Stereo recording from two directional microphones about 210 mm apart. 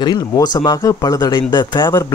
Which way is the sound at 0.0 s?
20° left (ahead or behind).